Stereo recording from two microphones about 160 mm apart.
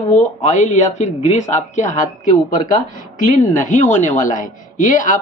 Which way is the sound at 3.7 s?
50° left (ahead or behind).